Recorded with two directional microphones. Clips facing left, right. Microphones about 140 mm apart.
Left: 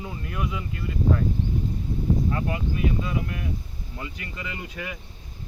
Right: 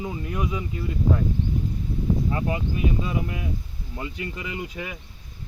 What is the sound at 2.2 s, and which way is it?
Speech, 20° right (ahead or behind).